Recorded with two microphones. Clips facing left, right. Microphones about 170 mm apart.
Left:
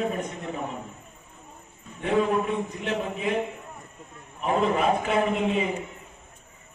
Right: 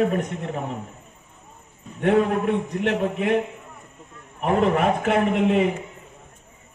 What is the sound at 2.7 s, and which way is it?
Speech, 70° right (ahead or behind).